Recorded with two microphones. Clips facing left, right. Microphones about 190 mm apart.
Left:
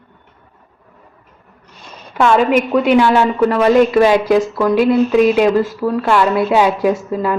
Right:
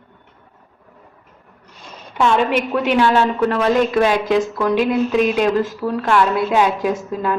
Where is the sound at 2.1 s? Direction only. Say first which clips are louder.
Left 4 dB; 5° left (ahead or behind).